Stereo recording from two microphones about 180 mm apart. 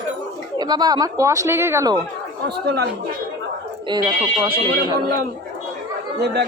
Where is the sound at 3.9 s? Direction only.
25° right (ahead or behind).